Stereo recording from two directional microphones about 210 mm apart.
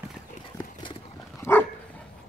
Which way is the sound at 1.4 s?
10° left (ahead or behind).